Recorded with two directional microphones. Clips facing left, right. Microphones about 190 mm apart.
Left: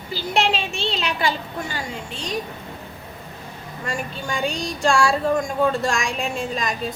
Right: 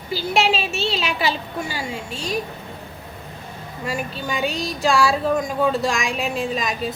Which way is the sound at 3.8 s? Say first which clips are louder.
Right 2 dB; 5° right (ahead or behind).